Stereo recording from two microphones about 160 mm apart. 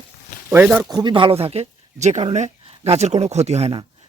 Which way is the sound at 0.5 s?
10° right (ahead or behind).